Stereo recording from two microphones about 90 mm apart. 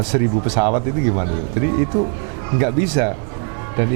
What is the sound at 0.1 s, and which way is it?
Speech, 15° right (ahead or behind).